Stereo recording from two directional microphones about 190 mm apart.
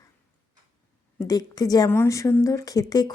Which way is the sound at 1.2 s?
20° left (ahead or behind).